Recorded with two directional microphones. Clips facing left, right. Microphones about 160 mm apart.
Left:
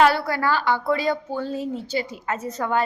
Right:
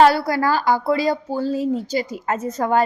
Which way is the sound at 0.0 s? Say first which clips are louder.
Right 4 dB; 35° right (ahead or behind).